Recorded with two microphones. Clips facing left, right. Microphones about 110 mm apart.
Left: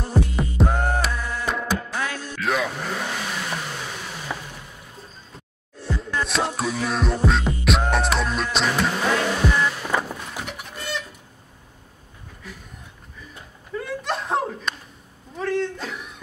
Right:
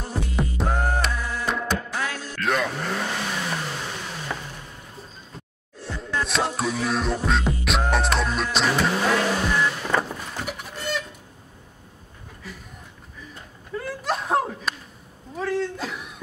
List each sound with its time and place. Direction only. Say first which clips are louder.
0.4 s music: left 2 dB; centre (ahead or behind)
2.3 s vehicle: even; centre (ahead or behind)
5.8 s music: left 1 dB; centre (ahead or behind)
13.3 s a sound: left 1 dB; centre (ahead or behind)